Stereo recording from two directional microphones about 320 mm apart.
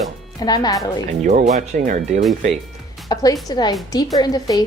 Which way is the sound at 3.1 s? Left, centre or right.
Centre.